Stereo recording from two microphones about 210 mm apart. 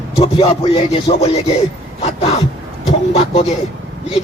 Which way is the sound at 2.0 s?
30° left (ahead or behind).